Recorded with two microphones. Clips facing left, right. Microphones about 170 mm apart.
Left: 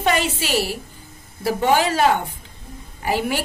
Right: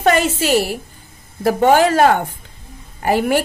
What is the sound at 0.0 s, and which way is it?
A woman's voice, 45° right (ahead or behind).